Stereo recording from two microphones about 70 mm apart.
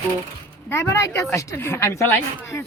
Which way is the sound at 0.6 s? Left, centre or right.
Left.